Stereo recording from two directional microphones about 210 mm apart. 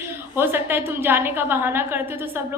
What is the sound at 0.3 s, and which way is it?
A woman's voice, 10° right (ahead or behind).